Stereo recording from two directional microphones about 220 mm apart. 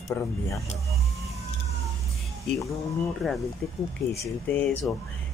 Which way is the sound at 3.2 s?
Centre (ahead or behind).